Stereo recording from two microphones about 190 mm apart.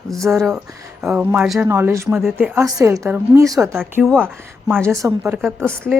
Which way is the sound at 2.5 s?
15° right (ahead or behind).